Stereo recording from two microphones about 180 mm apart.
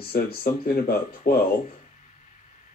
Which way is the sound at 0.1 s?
60° left (ahead or behind).